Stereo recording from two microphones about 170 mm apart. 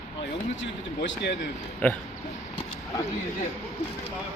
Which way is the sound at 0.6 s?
90° left.